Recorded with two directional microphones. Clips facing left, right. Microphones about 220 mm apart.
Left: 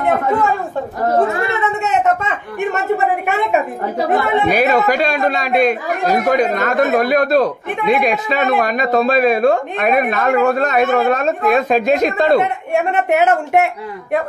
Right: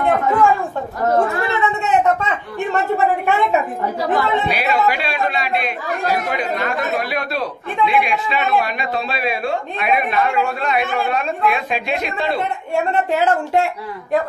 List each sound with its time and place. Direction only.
0.0 s a sound: 20° left (ahead or behind)
4.1 s speech: 45° left (ahead or behind)
13.1 s speech: 20° left (ahead or behind)